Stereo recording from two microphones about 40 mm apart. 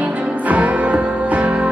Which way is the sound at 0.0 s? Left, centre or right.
Right.